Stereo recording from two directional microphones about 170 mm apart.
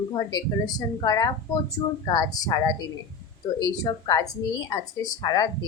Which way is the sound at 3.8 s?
20° left (ahead or behind).